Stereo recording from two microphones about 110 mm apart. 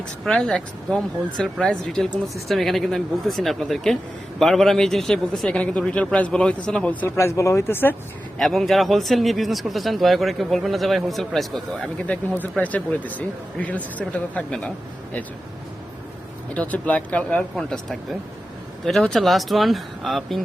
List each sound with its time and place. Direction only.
0.3 s a man's voice: 5° left (ahead or behind)
7.2 s speech: 25° left (ahead or behind)
8.4 s a man's voice: centre (ahead or behind)
16.6 s a man's voice: 15° left (ahead or behind)